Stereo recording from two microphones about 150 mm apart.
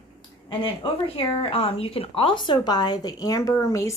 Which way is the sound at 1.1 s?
35° left (ahead or behind).